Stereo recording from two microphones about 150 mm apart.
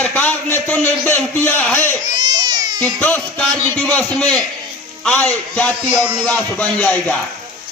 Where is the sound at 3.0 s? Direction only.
10° left (ahead or behind).